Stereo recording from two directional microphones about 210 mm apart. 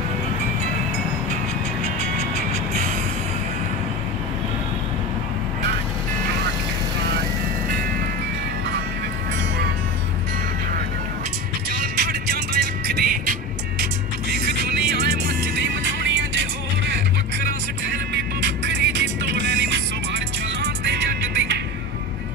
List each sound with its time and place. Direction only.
11.7 s music: 45° right (ahead or behind)
17.8 s music: 55° right (ahead or behind)